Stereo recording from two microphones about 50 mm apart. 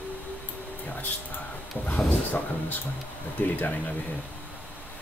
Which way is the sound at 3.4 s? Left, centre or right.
Left.